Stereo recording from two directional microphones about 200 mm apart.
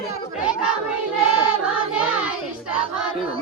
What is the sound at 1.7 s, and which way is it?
Child singing, 5° right (ahead or behind).